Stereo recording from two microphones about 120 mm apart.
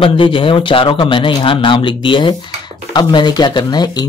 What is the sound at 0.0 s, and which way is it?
A man's voice, 45° left (ahead or behind).